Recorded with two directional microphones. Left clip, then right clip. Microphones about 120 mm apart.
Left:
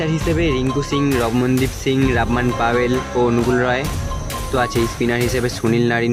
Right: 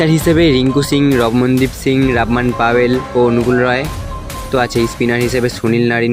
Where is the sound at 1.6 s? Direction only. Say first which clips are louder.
Right 4 dB; 35° right (ahead or behind).